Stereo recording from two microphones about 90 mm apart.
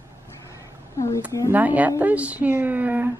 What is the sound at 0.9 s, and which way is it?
Child singing, 35° left (ahead or behind).